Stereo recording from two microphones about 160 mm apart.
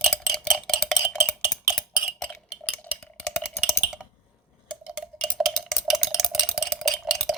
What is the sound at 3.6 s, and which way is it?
Typing, 5° right (ahead or behind).